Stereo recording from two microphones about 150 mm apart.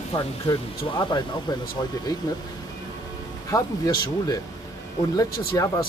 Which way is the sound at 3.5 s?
25° left (ahead or behind).